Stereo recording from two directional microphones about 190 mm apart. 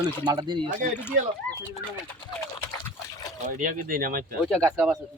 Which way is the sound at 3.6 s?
45° right (ahead or behind).